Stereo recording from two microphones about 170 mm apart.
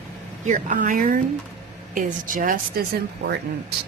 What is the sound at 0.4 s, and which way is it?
A woman's voice, 50° right (ahead or behind).